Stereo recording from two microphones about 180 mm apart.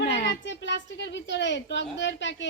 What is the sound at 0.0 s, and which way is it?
A woman's voice, 65° left (ahead or behind).